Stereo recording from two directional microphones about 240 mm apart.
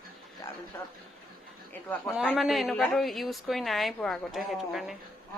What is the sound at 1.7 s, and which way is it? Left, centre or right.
A woman's voice, centre.